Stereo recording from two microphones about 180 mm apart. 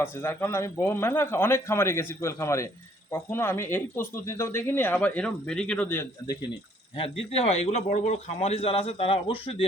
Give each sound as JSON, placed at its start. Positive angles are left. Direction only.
{"t": 0.0, "sound": "speech", "side_deg": 10}
{"t": 6.9, "sound": "speech", "side_deg": 30}